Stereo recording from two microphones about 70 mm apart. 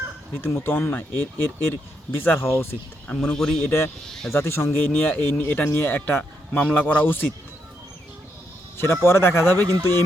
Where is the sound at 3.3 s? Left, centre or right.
Centre.